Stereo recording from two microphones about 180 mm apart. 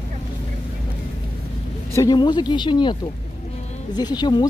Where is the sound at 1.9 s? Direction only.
20° left (ahead or behind).